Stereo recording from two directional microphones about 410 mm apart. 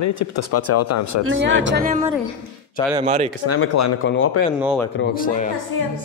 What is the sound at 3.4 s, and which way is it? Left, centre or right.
Speech, left.